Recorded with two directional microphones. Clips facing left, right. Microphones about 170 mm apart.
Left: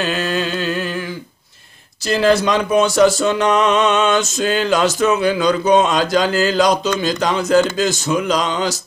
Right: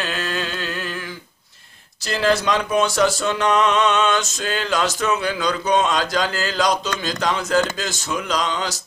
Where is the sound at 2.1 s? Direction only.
5° left (ahead or behind).